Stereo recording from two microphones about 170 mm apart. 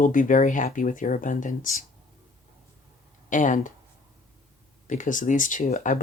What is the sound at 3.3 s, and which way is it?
Speech, 50° left (ahead or behind).